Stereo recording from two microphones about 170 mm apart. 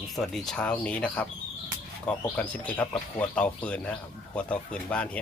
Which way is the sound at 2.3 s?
5° left (ahead or behind).